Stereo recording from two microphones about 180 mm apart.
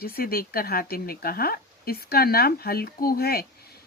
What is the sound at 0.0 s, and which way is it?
Speech, 55° left (ahead or behind).